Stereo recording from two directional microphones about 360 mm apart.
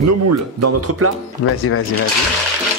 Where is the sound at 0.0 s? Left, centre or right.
Right.